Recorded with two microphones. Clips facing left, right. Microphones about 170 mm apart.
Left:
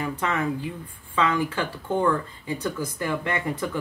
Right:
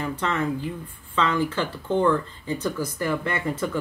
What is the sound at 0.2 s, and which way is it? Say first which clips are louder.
Speech: right 1 dB; 10° left (ahead or behind).